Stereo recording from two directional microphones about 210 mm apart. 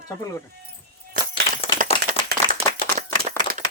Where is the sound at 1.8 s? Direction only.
40° right (ahead or behind).